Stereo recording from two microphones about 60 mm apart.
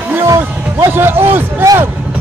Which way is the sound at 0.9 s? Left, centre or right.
Right.